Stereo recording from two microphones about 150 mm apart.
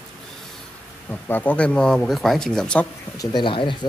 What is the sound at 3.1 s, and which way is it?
Speech, 30° left (ahead or behind).